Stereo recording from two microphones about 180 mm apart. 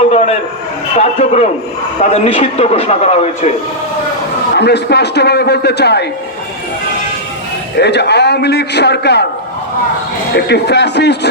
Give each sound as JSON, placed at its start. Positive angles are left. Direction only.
{"t": 0.1, "sound": "a sound", "side_deg": 40}
{"t": 0.9, "sound": "a man's voice", "side_deg": 35}
{"t": 4.5, "sound": "a man's voice", "side_deg": 65}
{"t": 7.8, "sound": "a man's voice", "side_deg": 70}
{"t": 10.3, "sound": "a man's voice", "side_deg": 70}